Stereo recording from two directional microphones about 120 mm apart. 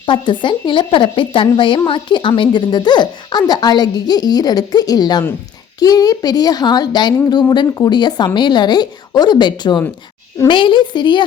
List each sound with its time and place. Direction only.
0.0 s speech: 40° left (ahead or behind)